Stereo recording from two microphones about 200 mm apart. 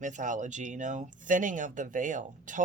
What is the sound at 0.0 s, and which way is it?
Speech, 40° right (ahead or behind).